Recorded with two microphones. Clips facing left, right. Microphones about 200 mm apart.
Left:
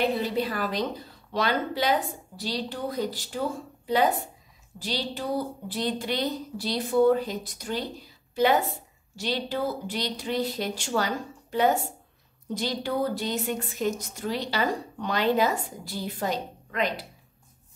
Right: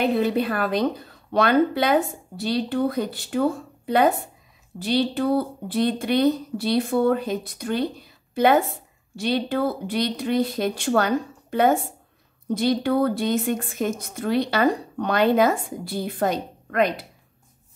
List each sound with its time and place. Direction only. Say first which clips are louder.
0.0 s a woman's voice: right 5 dB; 55° right (ahead or behind)